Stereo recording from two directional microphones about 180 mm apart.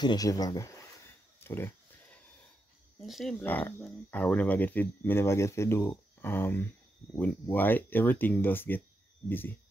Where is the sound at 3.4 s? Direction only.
10° left (ahead or behind).